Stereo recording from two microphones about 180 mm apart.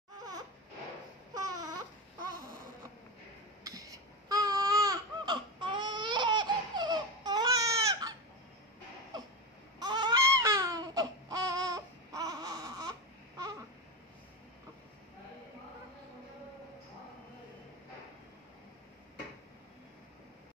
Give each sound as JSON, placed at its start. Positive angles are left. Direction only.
{"t": 1.3, "sound": "a sound", "side_deg": -20}
{"t": 3.6, "sound": "babbling", "side_deg": -20}
{"t": 9.8, "sound": "baby cry", "side_deg": -25}